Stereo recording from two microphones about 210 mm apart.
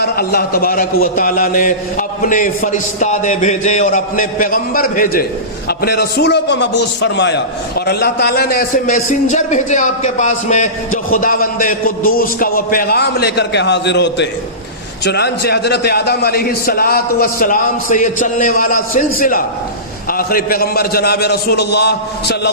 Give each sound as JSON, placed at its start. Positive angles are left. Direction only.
{"t": 0.0, "sound": "a man's voice", "side_deg": 50}